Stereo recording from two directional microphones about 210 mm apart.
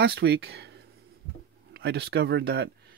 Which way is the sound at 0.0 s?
50° right (ahead or behind).